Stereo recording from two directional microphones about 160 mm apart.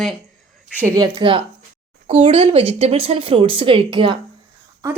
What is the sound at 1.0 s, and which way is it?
Speech, 30° right (ahead or behind).